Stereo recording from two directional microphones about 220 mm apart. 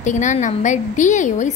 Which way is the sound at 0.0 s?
35° left (ahead or behind).